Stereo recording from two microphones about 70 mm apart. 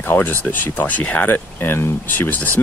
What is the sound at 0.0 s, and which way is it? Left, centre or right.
Speech, left.